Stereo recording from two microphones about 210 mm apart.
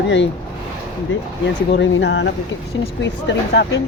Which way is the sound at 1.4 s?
60° left (ahead or behind).